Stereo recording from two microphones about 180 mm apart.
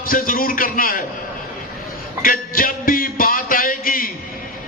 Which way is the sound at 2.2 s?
50° left (ahead or behind).